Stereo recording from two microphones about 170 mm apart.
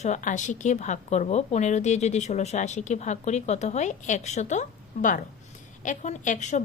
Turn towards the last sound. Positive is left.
turn(degrees=45)  # may be behind; listen again after turning